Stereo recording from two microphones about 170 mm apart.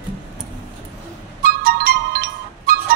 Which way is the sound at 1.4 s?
60° right (ahead or behind).